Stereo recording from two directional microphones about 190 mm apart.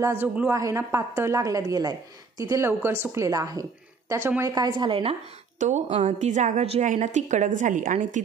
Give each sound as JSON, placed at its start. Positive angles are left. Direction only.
{"t": 0.0, "sound": "a woman's voice", "side_deg": -10}
{"t": 5.6, "sound": "a woman's voice", "side_deg": -40}